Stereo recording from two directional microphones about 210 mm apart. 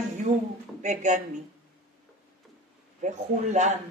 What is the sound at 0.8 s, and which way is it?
Speech, 35° right (ahead or behind).